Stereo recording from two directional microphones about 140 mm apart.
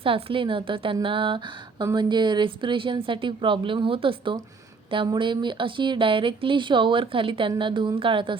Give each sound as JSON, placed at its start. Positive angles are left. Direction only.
{"t": 0.0, "sound": "a woman's voice", "side_deg": -40}